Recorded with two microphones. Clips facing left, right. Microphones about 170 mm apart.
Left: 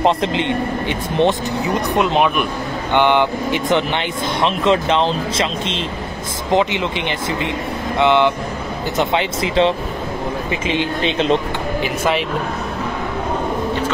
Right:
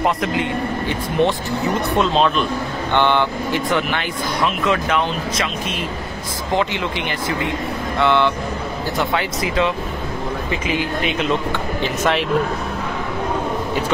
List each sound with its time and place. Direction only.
0.0 s speech: 25° left (ahead or behind)
11.8 s speech: 5° left (ahead or behind)